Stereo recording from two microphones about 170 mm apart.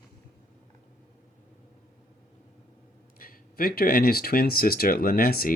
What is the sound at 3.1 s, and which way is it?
A man's voice, 55° left (ahead or behind).